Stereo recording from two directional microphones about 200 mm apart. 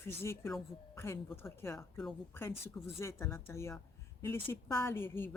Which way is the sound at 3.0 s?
10° left (ahead or behind).